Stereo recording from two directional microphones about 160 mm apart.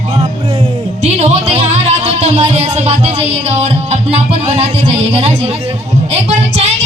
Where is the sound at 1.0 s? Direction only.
45° right (ahead or behind).